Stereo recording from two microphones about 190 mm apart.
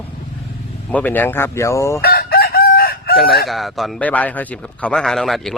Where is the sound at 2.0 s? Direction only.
55° left (ahead or behind).